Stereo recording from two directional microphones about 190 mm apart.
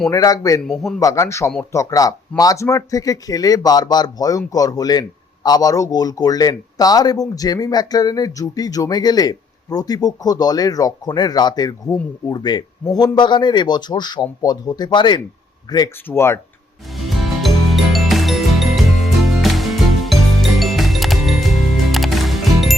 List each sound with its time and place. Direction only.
0.1 s a man's voice: 20° left (ahead or behind)
0.7 s a man's voice: centre (ahead or behind)
0.9 s a man's voice: 15° left (ahead or behind)
17.0 s ratchet: centre (ahead or behind)
19.4 s music: centre (ahead or behind)